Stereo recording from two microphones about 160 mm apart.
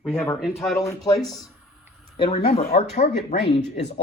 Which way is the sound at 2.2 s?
35° left (ahead or behind).